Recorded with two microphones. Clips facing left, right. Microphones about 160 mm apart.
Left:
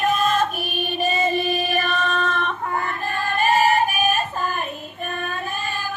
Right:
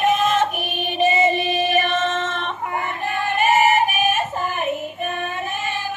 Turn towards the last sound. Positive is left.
turn(degrees=-20)  # may be behind; listen again after turning